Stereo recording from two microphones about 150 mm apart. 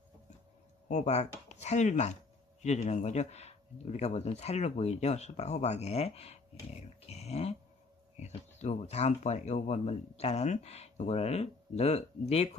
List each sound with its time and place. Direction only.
0.8 s speech: 50° left (ahead or behind)